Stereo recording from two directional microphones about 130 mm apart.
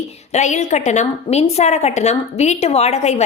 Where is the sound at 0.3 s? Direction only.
65° left (ahead or behind).